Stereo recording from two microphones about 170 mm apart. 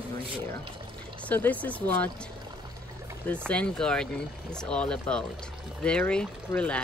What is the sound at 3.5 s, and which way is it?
Speech, 5° left (ahead or behind).